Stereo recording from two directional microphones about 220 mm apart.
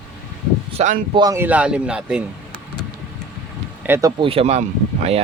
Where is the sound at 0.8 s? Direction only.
30° right (ahead or behind).